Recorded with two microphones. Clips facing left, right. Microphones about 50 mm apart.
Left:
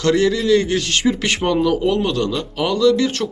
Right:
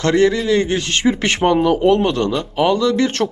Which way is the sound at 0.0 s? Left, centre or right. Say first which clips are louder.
Right 2 dB; right.